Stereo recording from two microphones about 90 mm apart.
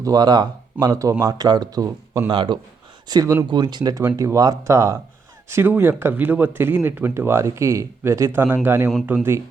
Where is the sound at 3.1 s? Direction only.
45° right (ahead or behind).